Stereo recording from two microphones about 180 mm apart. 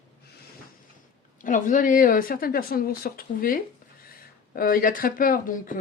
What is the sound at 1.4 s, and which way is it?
Speech, 45° left (ahead or behind).